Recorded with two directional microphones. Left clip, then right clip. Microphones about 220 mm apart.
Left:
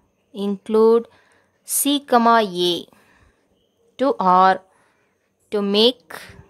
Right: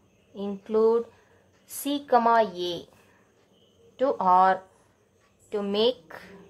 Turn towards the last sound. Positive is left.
turn(degrees=50)  # may be behind; listen again after turning